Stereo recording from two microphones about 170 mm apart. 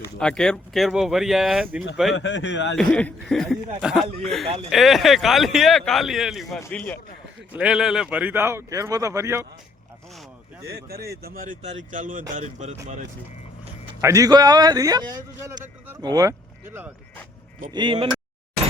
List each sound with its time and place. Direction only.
0.0 s speech: 5° left (ahead or behind)
2.1 s speech: 90° left
2.7 s speech: 5° left (ahead or behind)
6.6 s speech: 10° left (ahead or behind)
7.5 s speech: 5° right (ahead or behind)
10.7 s speech: 65° right (ahead or behind); by 12.7 s 45° right (ahead or behind)
14.0 s a man's voice: 20° right (ahead or behind)
17.7 s a man's voice: 25° right (ahead or behind)